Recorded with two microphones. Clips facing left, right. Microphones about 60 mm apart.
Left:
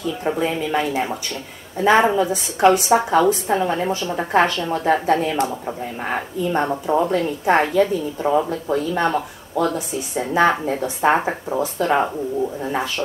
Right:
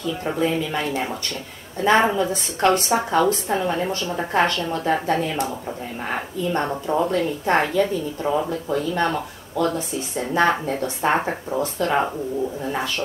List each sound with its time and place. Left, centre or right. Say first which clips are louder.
0.2 s a woman's voice: left 1 dB; centre